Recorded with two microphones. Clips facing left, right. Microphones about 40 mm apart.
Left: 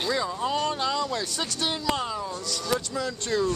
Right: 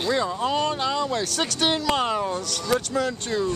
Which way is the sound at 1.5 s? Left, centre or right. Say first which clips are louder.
Right 5 dB; right.